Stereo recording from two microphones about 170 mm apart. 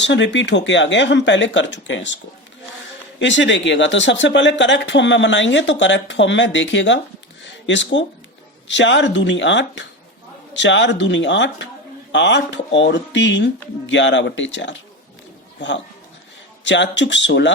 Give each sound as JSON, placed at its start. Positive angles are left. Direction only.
{"t": 0.0, "sound": "speech", "side_deg": 90}
{"t": 3.2, "sound": "speech", "side_deg": 90}
{"t": 16.6, "sound": "speech", "side_deg": 90}